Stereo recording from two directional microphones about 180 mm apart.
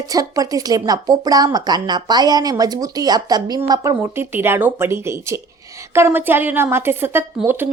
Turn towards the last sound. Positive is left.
turn(degrees=-10)  # may be behind; listen again after turning